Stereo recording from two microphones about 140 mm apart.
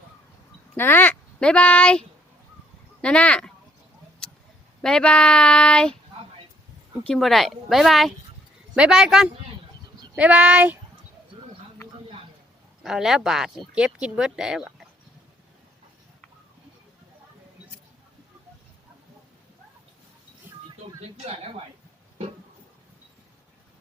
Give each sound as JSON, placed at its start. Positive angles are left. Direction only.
{"t": 0.8, "sound": "speech", "side_deg": 15}
{"t": 4.8, "sound": "speech", "side_deg": 5}
{"t": 7.1, "sound": "speech", "side_deg": 0}
{"t": 12.8, "sound": "speech", "side_deg": -5}
{"t": 21.0, "sound": "speech", "side_deg": -50}